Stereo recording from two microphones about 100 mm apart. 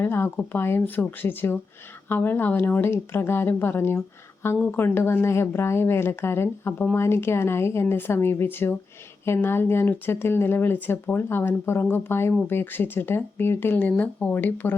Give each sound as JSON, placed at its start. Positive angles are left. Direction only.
{"t": 0.0, "sound": "speech", "side_deg": 25}